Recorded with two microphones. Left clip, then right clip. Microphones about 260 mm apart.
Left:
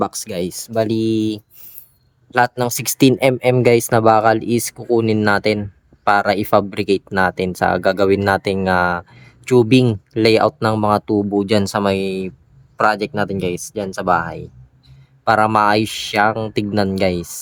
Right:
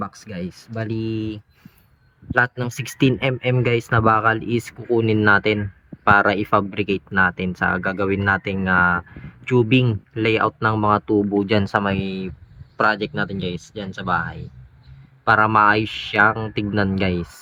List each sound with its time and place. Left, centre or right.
0.0 s speech: left